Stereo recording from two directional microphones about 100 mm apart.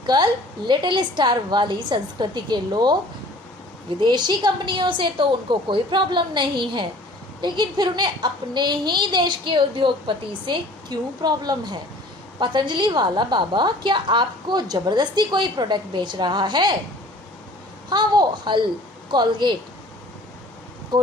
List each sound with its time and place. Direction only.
0.0 s a woman's voice: 45° right (ahead or behind)
4.0 s a woman's voice: 50° right (ahead or behind)
17.8 s a woman's voice: 45° right (ahead or behind)
20.9 s speech: 45° right (ahead or behind)